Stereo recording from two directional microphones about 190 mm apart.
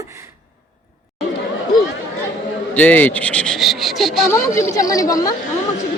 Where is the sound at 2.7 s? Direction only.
10° left (ahead or behind).